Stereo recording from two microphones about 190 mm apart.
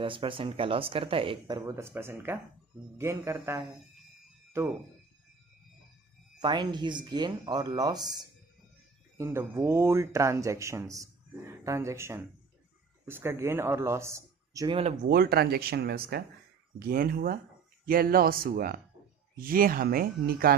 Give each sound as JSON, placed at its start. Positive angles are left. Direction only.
{"t": 0.0, "sound": "speech", "side_deg": -25}
{"t": 6.4, "sound": "speech", "side_deg": -25}
{"t": 15.0, "sound": "speech", "side_deg": -55}